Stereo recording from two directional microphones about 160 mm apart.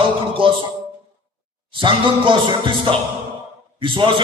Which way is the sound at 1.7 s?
30° right (ahead or behind).